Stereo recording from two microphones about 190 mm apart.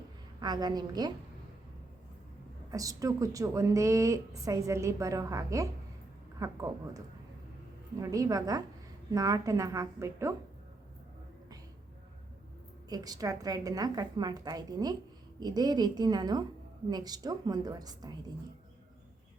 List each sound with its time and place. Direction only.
0.3 s a woman's voice: 20° right (ahead or behind)
2.6 s a woman's voice: 20° right (ahead or behind)
12.9 s a woman's voice: 20° right (ahead or behind)